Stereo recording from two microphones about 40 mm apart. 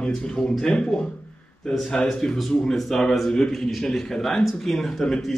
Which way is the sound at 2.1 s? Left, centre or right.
Centre.